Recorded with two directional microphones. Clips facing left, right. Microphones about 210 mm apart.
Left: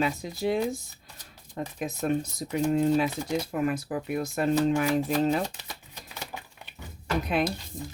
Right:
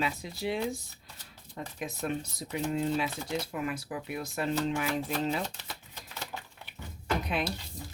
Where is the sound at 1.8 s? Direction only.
45° left (ahead or behind).